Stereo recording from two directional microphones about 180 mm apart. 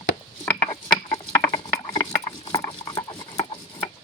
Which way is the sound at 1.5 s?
30° left (ahead or behind).